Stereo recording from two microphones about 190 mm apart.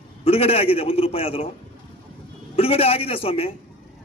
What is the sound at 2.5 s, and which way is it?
A man's voice, 30° left (ahead or behind).